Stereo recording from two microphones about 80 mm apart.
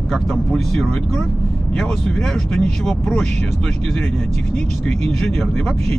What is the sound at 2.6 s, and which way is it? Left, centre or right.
Speech, centre.